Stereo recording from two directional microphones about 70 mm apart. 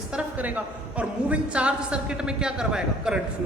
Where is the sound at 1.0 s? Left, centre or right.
Centre.